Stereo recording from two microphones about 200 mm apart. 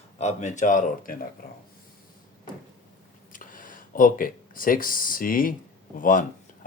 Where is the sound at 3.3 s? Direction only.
40° left (ahead or behind).